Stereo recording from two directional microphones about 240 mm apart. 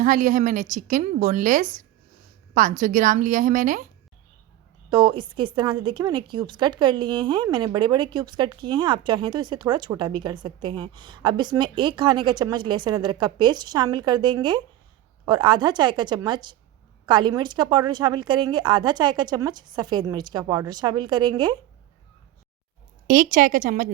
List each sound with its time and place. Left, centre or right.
0.0 s a woman's voice: right
4.9 s a woman's voice: centre
23.0 s a woman's voice: right